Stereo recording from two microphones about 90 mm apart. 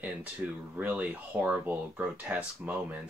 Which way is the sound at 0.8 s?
20° right (ahead or behind).